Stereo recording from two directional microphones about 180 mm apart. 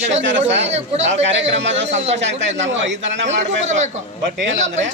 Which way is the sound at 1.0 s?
90° right.